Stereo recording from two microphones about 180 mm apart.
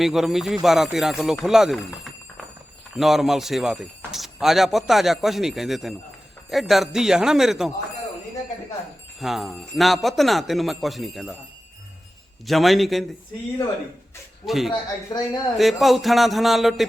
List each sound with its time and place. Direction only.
0.0 s speech: centre (ahead or behind)
9.2 s speech: centre (ahead or behind)
12.5 s speech: centre (ahead or behind)
14.4 s speech: centre (ahead or behind)
14.7 s speech: 25° left (ahead or behind)
15.5 s speech: centre (ahead or behind)